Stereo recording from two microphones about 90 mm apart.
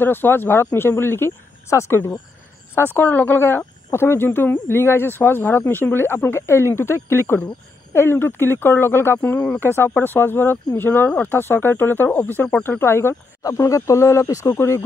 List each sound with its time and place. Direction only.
0.0 s speech: 25° left (ahead or behind)
13.4 s speech: 40° left (ahead or behind)